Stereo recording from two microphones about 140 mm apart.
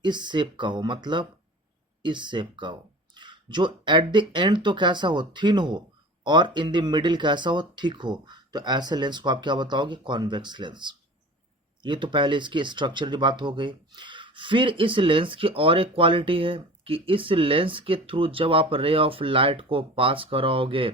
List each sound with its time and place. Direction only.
0.0 s speech: 35° right (ahead or behind)